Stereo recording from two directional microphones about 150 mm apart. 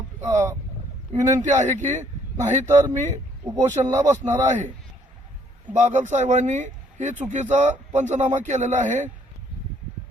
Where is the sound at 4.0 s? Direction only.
55° right (ahead or behind).